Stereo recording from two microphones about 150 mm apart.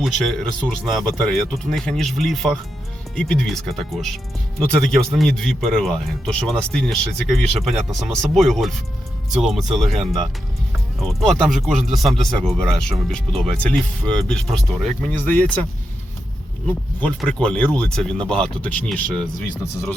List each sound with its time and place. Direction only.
0.0 s a man's voice: centre (ahead or behind)
17.2 s a man's voice: 5° left (ahead or behind)